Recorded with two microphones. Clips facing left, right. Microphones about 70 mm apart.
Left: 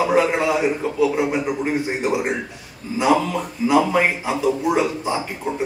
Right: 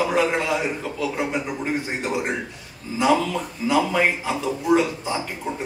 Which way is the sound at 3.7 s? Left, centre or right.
Centre.